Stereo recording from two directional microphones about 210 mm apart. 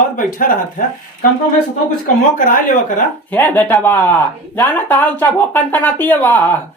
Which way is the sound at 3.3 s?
10° left (ahead or behind).